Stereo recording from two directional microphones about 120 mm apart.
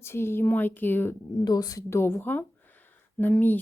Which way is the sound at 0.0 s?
20° left (ahead or behind).